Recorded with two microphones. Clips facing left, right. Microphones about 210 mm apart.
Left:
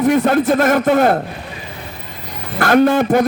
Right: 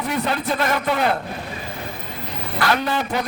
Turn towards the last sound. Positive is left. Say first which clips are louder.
# left 11 dB
turn(degrees=50)  # may be behind; listen again after turning